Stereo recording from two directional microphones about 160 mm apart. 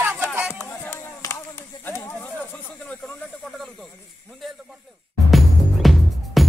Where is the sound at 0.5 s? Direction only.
10° left (ahead or behind).